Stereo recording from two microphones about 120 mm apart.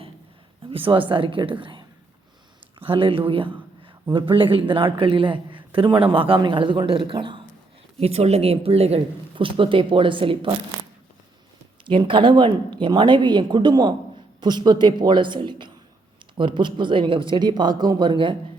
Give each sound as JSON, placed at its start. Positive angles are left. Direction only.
{"t": 0.7, "sound": "a man's voice", "side_deg": -50}
{"t": 7.9, "sound": "a man's voice", "side_deg": -60}
{"t": 11.9, "sound": "speech", "side_deg": -45}